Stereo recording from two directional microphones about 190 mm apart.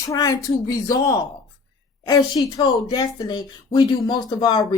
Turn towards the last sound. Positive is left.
turn(degrees=20)  # may be behind; listen again after turning